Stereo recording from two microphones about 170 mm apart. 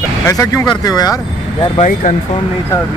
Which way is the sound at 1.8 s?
50° left (ahead or behind).